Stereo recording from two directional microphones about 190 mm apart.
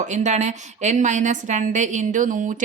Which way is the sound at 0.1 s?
40° right (ahead or behind).